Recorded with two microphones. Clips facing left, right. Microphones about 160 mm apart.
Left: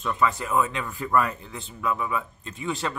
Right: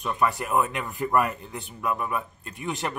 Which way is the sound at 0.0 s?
15° right (ahead or behind).